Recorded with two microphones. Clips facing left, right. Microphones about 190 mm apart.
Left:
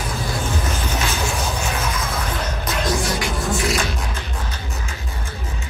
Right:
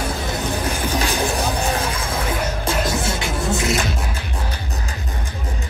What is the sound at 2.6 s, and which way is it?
Music, 25° right (ahead or behind).